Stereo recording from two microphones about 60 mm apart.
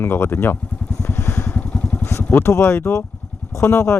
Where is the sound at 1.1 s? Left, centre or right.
Left.